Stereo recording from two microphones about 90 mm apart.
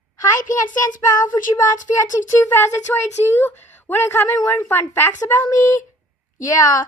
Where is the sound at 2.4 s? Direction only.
20° left (ahead or behind).